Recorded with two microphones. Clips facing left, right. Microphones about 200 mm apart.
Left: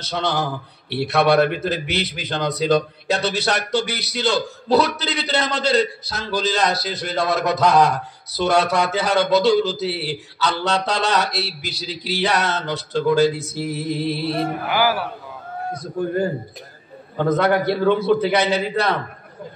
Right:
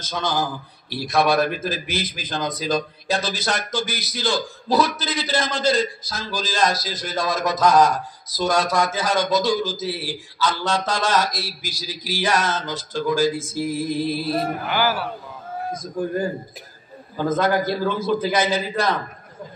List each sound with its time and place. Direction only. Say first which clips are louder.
0.0 s a man's voice: left 1 dB; 65° left (ahead or behind)
14.7 s a man's voice: left 3 dB; 15° left (ahead or behind)
15.7 s a man's voice: left 2 dB; 65° left (ahead or behind)